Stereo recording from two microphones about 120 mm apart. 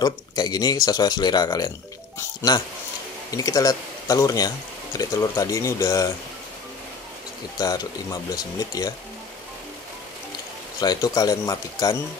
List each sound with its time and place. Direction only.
0.0 s speech: 30° left (ahead or behind)
7.5 s speech: 30° left (ahead or behind)
10.8 s speech: 35° left (ahead or behind)